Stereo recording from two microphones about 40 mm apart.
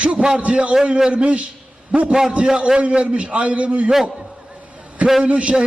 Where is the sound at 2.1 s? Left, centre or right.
Centre.